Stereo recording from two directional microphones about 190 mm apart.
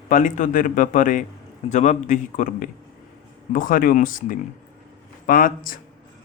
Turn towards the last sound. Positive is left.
turn(degrees=45)  # may be behind; listen again after turning